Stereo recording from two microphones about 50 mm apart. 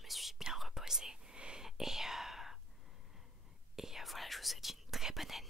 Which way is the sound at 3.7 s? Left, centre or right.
Centre.